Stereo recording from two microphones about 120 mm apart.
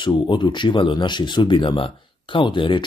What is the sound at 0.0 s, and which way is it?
Speech, 40° left (ahead or behind).